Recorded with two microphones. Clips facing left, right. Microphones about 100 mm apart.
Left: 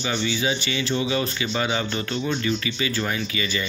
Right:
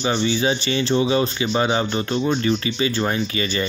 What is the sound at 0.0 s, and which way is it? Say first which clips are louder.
Speech: right 5 dB; 30° right (ahead or behind).